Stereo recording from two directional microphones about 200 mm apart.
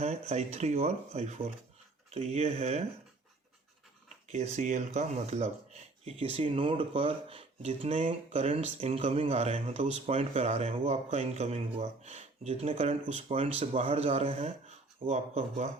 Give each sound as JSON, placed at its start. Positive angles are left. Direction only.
{"t": 0.0, "sound": "speech", "side_deg": -35}
{"t": 4.3, "sound": "speech", "side_deg": -35}